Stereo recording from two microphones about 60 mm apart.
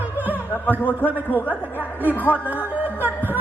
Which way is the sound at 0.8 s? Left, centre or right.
Left.